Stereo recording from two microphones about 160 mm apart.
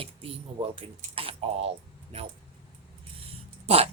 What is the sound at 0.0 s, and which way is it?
Speech, 35° right (ahead or behind).